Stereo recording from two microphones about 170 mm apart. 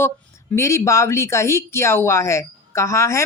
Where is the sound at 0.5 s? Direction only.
15° left (ahead or behind).